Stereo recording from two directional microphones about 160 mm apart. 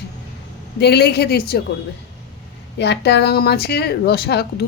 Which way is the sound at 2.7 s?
90° left.